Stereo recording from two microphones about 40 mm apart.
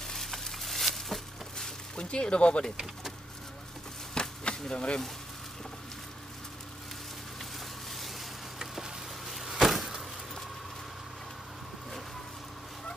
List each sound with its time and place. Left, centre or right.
0.0 s a sound: centre
2.0 s speech: left
4.1 s chop: centre
9.3 s vehicle: centre